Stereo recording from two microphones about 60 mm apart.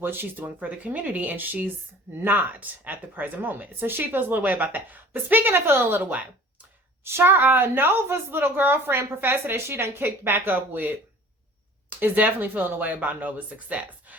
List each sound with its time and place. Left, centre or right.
0.0 s a woman's voice: right
7.0 s a woman's voice: right